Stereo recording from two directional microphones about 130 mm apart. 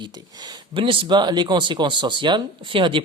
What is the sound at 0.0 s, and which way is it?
Speech, 35° right (ahead or behind).